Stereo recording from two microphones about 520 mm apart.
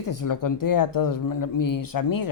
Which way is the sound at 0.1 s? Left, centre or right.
Left.